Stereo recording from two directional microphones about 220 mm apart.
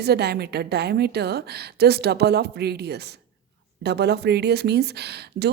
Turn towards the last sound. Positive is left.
turn(degrees=-50)  # may be behind; listen again after turning